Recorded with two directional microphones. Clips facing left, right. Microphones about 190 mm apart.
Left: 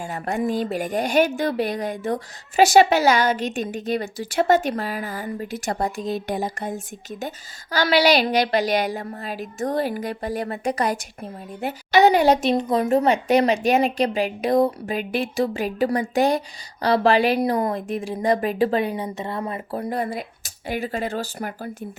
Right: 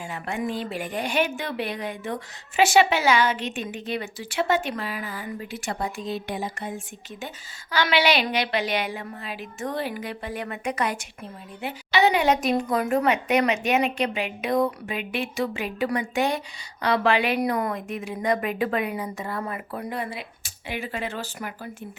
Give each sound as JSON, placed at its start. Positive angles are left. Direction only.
{"t": 0.0, "sound": "a woman's voice", "side_deg": 40}